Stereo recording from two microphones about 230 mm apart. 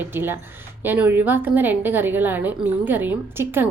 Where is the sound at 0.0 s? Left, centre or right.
Centre.